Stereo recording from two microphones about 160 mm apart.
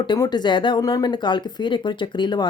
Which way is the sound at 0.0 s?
25° left (ahead or behind).